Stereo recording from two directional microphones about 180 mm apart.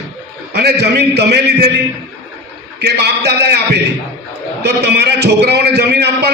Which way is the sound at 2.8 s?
65° right (ahead or behind).